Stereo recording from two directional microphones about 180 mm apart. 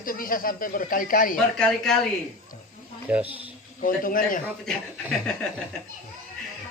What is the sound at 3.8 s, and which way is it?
Speech, 50° left (ahead or behind).